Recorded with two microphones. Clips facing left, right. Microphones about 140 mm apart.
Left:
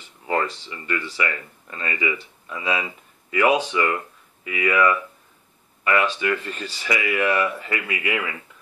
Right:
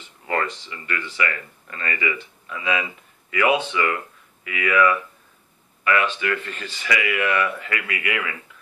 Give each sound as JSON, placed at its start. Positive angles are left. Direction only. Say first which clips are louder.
{"t": 0.3, "sound": "speech", "louder": "left 1 dB", "side_deg": 20}
{"t": 1.0, "sound": "speech", "louder": "even", "side_deg": 30}
{"t": 6.2, "sound": "speech", "louder": "left 2 dB", "side_deg": 15}
{"t": 6.5, "sound": "speech", "louder": "even", "side_deg": 30}
{"t": 7.2, "sound": "speech", "louder": "left 1 dB", "side_deg": 15}